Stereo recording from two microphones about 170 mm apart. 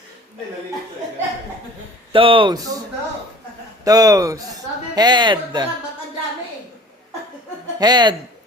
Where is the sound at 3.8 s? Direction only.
20° right (ahead or behind).